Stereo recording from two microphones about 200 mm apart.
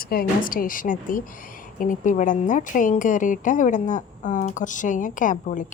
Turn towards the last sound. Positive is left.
turn(degrees=40)  # may be behind; listen again after turning